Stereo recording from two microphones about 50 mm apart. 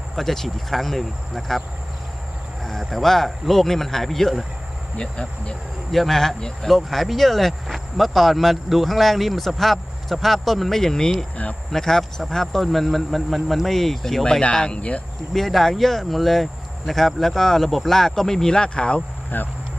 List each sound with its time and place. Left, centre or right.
0.2 s speech: centre
2.6 s speech: centre
4.9 s speech: centre
5.9 s speech: centre
14.5 s speech: centre
15.3 s speech: centre; by 19.0 s left
19.3 s speech: left